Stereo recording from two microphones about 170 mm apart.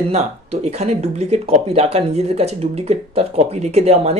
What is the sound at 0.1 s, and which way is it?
Speech, 40° right (ahead or behind).